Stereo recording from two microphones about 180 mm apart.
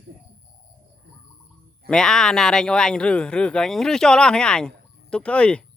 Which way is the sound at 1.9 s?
5° left (ahead or behind).